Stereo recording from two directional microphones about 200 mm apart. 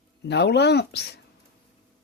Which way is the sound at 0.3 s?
60° left (ahead or behind).